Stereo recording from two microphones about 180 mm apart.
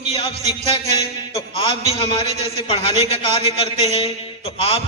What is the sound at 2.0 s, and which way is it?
A man's voice, 30° left (ahead or behind).